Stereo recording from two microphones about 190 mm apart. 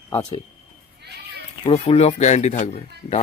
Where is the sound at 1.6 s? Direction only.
25° left (ahead or behind).